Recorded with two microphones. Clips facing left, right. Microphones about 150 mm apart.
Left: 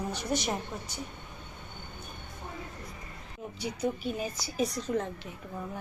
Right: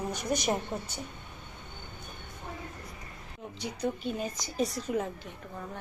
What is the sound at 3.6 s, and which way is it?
A woman's voice, 10° left (ahead or behind).